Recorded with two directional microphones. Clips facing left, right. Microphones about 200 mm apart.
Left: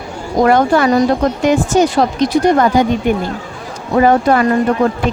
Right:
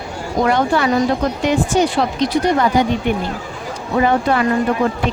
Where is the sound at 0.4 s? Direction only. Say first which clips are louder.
Left 5 dB; 45° left (ahead or behind).